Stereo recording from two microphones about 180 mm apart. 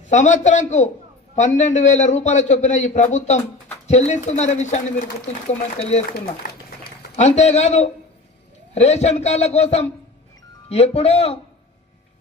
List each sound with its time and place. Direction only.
0.1 s a man's voice: 40° left (ahead or behind)
7.2 s a man's voice: 40° left (ahead or behind)